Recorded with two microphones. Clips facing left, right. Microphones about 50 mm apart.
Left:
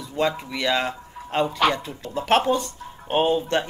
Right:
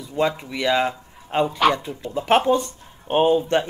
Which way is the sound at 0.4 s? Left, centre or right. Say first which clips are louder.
Right 3 dB; centre.